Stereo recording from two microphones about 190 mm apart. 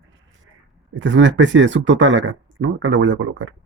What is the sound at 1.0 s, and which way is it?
Speech, 80° right.